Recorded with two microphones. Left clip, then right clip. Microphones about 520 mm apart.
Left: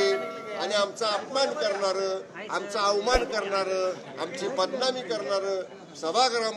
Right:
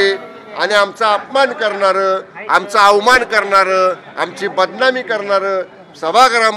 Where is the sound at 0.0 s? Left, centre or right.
Right.